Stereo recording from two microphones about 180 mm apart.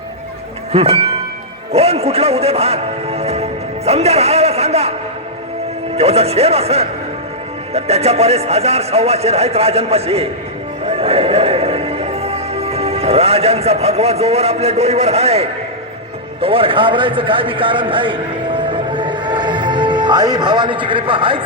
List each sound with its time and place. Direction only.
0.7 s a man's voice: 35° right (ahead or behind)
6.0 s speech: 35° right (ahead or behind)
10.8 s music: 30° right (ahead or behind)
16.4 s a man's voice: 30° right (ahead or behind)